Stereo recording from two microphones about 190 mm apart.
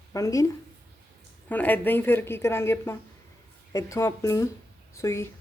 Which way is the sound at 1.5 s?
10° left (ahead or behind).